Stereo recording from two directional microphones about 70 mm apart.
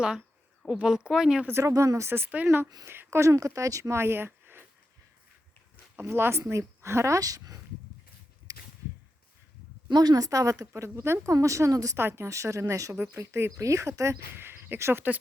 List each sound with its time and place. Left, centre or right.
0.0 s a woman's voice: centre
1.5 s speech: right
6.1 s speech: right
8.5 s a sound: right
9.9 s speech: right
10.7 s speech: right
11.3 s speech: right
11.9 s speech: right
12.9 s speech: right
13.3 s speech: right
14.3 s speech: right